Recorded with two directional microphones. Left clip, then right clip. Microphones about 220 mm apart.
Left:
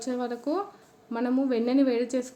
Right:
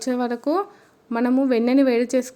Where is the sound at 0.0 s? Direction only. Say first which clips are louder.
Right 7 dB; 40° right (ahead or behind).